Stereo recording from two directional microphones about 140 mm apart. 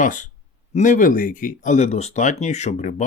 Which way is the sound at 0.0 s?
65° left (ahead or behind).